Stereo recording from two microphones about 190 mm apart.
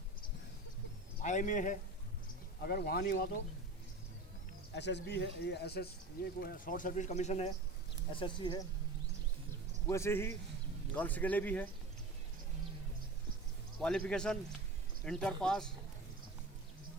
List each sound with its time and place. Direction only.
1.2 s speech: 40° left (ahead or behind)
2.6 s speech: 55° left (ahead or behind)
4.7 s speech: 65° left (ahead or behind); by 7.5 s 35° left (ahead or behind)
8.1 s speech: 25° left (ahead or behind)
9.8 s speech: 15° left (ahead or behind)
13.7 s speech: 5° left (ahead or behind)